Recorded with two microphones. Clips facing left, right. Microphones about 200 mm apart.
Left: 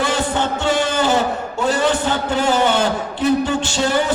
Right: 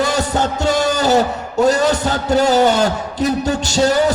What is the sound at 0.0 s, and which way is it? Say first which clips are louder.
Music: right 2 dB; 40° right (ahead or behind).